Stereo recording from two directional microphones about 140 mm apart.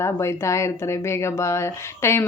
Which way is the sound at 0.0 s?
20° left (ahead or behind).